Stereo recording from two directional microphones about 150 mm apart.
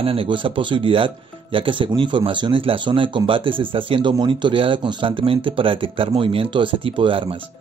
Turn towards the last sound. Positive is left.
turn(degrees=-35)  # may be behind; listen again after turning